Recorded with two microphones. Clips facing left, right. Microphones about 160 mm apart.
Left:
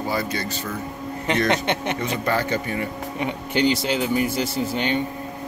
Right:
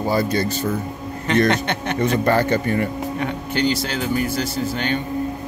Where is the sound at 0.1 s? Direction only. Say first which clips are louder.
Right 8 dB; 40° right (ahead or behind).